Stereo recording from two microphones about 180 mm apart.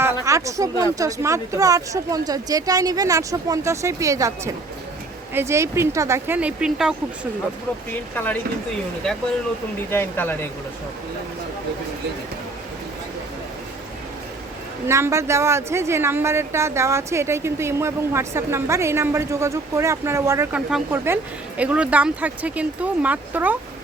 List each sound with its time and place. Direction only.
0.0 s speech: 15° right (ahead or behind)
8.1 s speech: 10° left (ahead or behind)
9.9 s speech: 10° left (ahead or behind)
14.8 s speech: 15° right (ahead or behind)